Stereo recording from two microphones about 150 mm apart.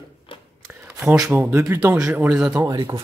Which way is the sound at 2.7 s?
30° right (ahead or behind).